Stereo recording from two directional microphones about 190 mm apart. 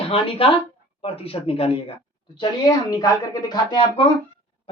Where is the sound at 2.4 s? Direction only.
20° left (ahead or behind).